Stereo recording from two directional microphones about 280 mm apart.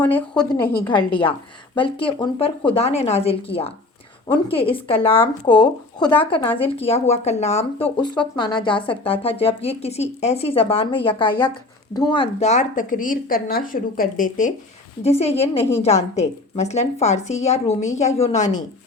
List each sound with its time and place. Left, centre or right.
0.1 s speech: centre
0.9 s speech: centre